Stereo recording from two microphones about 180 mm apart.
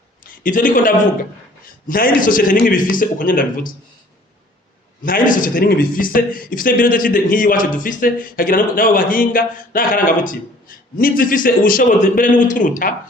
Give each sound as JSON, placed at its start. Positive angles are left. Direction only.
{"t": 0.3, "sound": "speech", "side_deg": 50}
{"t": 5.0, "sound": "speech", "side_deg": 50}